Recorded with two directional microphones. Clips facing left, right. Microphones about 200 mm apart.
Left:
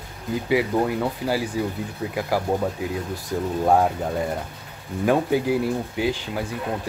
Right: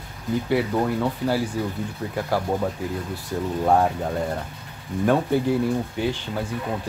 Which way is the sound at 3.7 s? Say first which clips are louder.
Left 1 dB; 5° left (ahead or behind).